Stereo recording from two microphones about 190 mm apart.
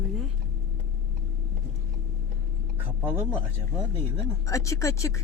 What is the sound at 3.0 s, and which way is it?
Speech, 10° right (ahead or behind).